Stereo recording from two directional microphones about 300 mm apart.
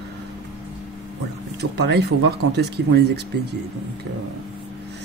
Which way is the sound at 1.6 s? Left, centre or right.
Right.